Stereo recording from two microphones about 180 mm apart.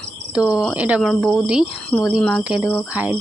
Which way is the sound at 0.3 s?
5° right (ahead or behind).